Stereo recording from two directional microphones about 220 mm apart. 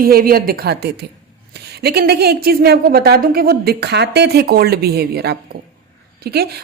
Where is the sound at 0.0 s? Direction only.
40° right (ahead or behind).